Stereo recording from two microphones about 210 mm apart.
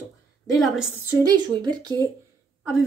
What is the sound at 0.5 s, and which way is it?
Speech, centre (ahead or behind).